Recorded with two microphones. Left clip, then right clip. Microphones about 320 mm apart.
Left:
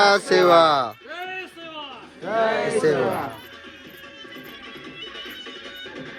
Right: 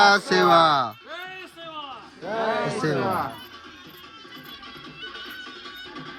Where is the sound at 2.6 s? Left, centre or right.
Centre.